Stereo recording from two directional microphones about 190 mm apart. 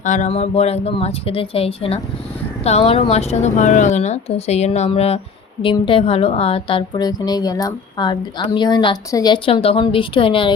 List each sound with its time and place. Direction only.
0.0 s a woman's voice: 40° left (ahead or behind)